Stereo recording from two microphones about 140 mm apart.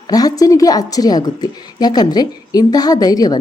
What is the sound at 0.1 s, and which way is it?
A woman's voice, 25° left (ahead or behind).